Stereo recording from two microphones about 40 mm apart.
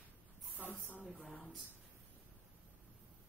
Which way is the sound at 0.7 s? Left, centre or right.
Right.